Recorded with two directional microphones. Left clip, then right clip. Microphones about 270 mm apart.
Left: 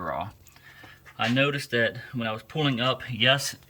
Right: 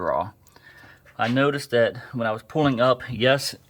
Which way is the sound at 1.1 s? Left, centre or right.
Centre.